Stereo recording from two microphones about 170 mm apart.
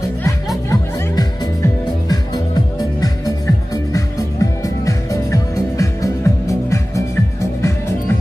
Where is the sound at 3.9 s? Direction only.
20° left (ahead or behind).